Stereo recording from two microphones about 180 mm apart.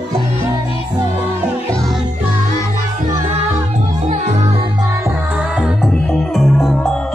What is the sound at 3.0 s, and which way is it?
Music, 35° right (ahead or behind).